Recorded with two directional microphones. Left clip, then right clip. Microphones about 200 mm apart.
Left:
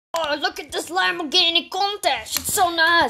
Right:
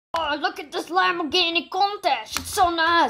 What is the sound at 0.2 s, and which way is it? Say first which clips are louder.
A woman's voice: left 2 dB; 35° left (ahead or behind).